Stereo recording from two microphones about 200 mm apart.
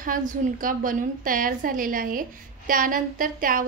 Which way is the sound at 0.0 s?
40° right (ahead or behind).